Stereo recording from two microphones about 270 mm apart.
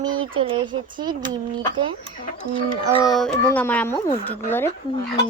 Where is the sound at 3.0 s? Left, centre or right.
Centre.